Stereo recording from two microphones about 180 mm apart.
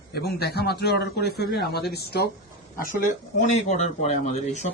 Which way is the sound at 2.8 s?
40° left (ahead or behind).